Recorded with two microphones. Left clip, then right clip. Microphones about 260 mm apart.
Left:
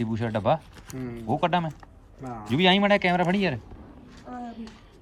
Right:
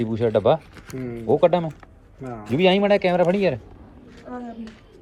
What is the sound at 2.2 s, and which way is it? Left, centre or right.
Speech, centre.